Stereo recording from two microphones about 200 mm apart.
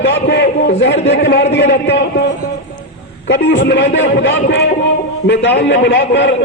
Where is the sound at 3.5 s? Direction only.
65° left (ahead or behind).